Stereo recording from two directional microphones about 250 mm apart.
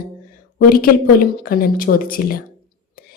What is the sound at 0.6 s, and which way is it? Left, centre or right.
A woman's voice, left.